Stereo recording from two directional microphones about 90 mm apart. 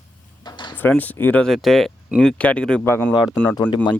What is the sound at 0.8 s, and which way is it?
Speech, 20° left (ahead or behind).